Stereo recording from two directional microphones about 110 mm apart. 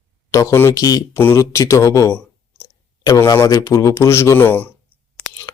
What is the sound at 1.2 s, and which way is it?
Speech, 20° left (ahead or behind).